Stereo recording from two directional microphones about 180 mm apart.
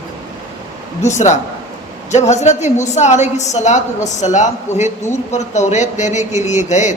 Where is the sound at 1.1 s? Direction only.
40° left (ahead or behind).